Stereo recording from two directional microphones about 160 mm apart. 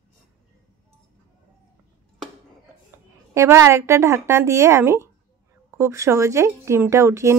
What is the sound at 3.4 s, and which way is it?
Speech, 15° right (ahead or behind).